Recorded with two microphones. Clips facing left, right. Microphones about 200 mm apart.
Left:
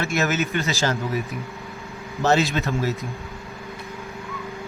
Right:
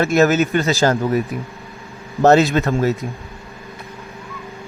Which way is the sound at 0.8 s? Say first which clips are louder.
Right 8 dB; 60° right (ahead or behind).